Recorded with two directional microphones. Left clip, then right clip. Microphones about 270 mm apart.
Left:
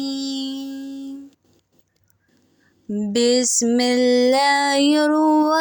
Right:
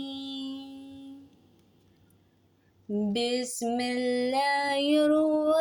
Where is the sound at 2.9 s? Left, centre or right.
Left.